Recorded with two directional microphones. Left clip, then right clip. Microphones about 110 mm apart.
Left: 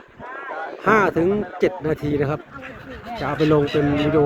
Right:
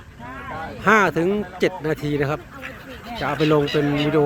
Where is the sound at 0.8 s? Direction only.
5° right (ahead or behind).